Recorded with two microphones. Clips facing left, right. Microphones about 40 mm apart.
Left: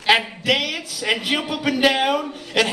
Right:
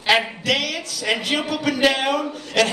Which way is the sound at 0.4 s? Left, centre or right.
Centre.